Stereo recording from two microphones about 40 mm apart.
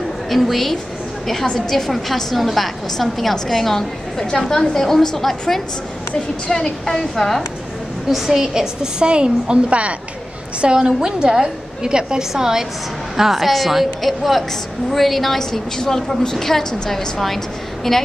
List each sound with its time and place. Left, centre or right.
0.3 s a woman's voice: centre
6.5 s a woman's voice: centre
8.1 s a woman's voice: centre
9.0 s a woman's voice: right
10.6 s a woman's voice: right
13.2 s a woman's voice: centre